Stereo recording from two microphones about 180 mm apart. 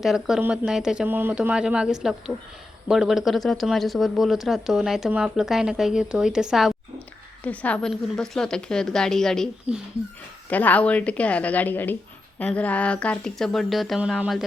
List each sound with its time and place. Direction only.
0.0 s a woman's voice: centre (ahead or behind)